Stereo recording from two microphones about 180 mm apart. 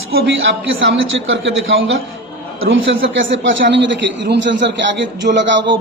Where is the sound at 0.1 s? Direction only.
75° right (ahead or behind).